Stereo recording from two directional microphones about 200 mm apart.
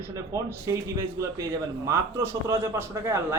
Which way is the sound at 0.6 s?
15° right (ahead or behind).